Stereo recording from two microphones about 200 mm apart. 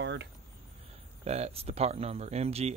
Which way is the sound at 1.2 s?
30° right (ahead or behind).